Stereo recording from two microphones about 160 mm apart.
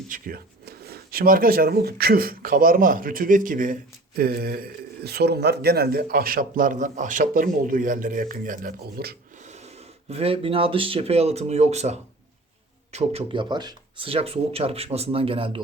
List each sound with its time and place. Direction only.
0.1 s speech: 65° right (ahead or behind)
9.4 s speech: 45° right (ahead or behind)